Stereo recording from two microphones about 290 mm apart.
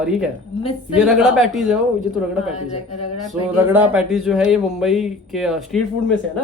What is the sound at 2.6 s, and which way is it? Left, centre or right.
Speech, left.